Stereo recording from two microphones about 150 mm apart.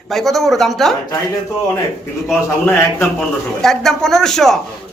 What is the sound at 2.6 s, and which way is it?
Speech, 15° left (ahead or behind).